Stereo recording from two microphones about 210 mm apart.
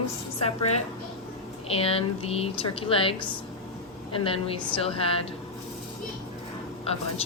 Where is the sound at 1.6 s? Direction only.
25° left (ahead or behind).